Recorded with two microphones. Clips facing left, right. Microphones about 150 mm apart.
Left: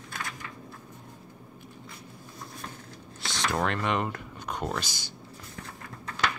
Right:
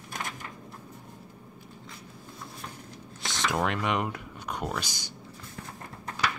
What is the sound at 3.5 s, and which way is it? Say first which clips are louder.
Speech: even; 10° right (ahead or behind).